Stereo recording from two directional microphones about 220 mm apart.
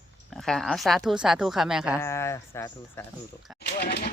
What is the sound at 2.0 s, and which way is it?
Speech, 10° left (ahead or behind).